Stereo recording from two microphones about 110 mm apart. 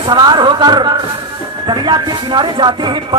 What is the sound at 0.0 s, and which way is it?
Speech, 40° right (ahead or behind).